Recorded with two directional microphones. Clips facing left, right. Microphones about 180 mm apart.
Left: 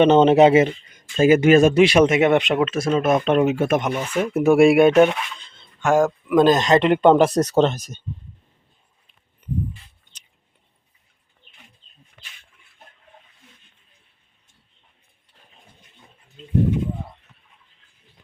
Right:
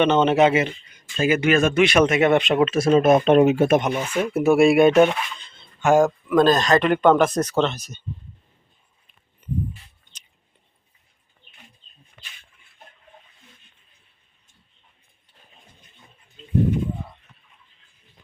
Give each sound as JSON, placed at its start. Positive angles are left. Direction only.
{"t": 0.0, "sound": "speech", "side_deg": 35}
{"t": 2.7, "sound": "speech", "side_deg": -30}
{"t": 3.8, "sound": "speech", "side_deg": -15}
{"t": 4.2, "sound": "speech", "side_deg": 15}
{"t": 4.9, "sound": "speech", "side_deg": 0}
{"t": 6.2, "sound": "speech", "side_deg": 15}